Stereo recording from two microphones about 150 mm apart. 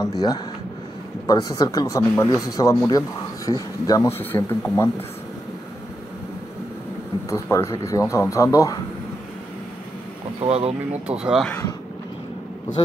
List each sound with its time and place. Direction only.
0.0 s speech: 25° left (ahead or behind)
7.2 s speech: 20° left (ahead or behind)
10.4 s speech: 45° right (ahead or behind)
11.1 s speech: 5° right (ahead or behind)